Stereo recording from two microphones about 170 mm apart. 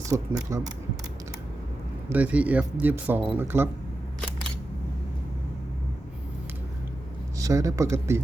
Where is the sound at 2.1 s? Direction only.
10° right (ahead or behind).